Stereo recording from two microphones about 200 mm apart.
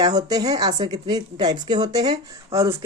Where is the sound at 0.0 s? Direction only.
20° right (ahead or behind).